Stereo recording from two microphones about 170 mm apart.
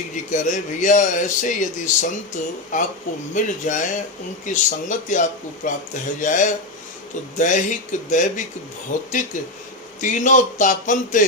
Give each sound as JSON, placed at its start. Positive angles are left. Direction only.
{"t": 0.3, "sound": "speech", "side_deg": 45}